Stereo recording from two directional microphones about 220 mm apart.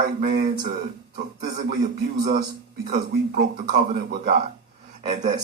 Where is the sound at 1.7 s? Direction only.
40° right (ahead or behind).